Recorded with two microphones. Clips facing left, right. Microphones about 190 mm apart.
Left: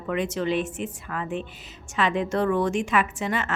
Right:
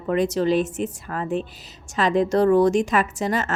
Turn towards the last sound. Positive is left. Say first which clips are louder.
# right 3 dB
turn(degrees=-40)  # may be behind; listen again after turning